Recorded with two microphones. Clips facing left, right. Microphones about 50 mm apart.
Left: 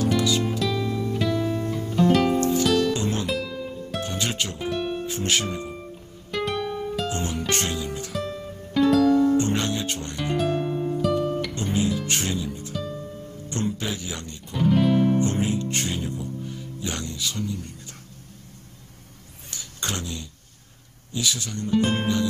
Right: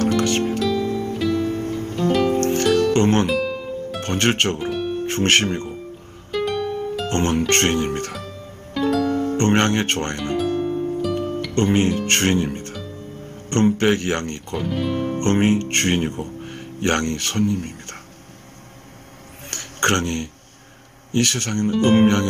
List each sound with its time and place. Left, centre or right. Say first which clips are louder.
0.0 s music: right 3 dB; right
4.0 s speech: right 9 dB; right
4.6 s music: right 3 dB; centre
5.0 s speech: right 7 dB; right
6.3 s music: right 4 dB; centre
7.1 s speech: right 7 dB; right
8.7 s music: left 2 dB; centre
9.1 s speech: right 1 dB; right
10.3 s music: right 2 dB; centre
11.5 s speech: right 7 dB; right
14.6 s speech: left 5 dB; centre
15.1 s speech: right 5 dB; right
19.4 s a sound: right 11 dB; right
21.1 s speech: right 7 dB; right